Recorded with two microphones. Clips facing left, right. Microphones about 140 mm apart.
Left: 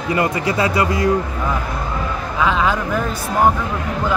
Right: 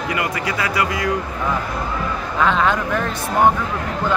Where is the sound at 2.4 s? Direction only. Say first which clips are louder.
Even; 5° left (ahead or behind).